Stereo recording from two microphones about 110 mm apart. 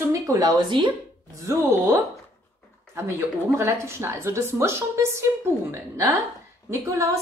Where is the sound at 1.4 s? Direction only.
25° right (ahead or behind).